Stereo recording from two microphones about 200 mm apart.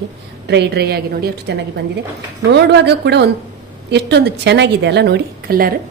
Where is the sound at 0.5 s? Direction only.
55° right (ahead or behind).